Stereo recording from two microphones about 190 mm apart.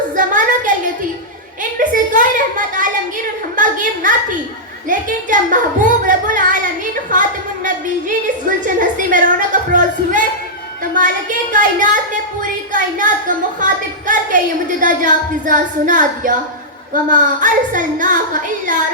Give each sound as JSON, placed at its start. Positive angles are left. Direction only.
{"t": 0.2, "sound": "a woman's voice", "side_deg": -45}
{"t": 1.8, "sound": "a sound", "side_deg": -45}
{"t": 8.4, "sound": "music", "side_deg": -45}
{"t": 10.9, "sound": "a woman's voice", "side_deg": -45}